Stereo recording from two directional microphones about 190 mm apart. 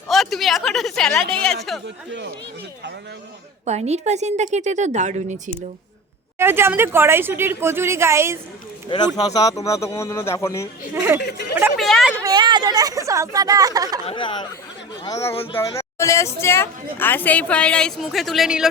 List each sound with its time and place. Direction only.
0.1 s a woman's voice: centre (ahead or behind)
3.7 s speech: 35° right (ahead or behind)
6.4 s a woman's voice: 10° right (ahead or behind)
9.1 s speech: 20° left (ahead or behind)
10.9 s a woman's voice: 10° right (ahead or behind)
11.2 s speech: 60° left (ahead or behind)
11.5 s a woman's voice: 10° right (ahead or behind)
11.9 s a woman's voice: centre (ahead or behind)
12.1 s speech: 20° right (ahead or behind)
14.1 s speech: 25° left (ahead or behind); by 18.7 s 5° right (ahead or behind)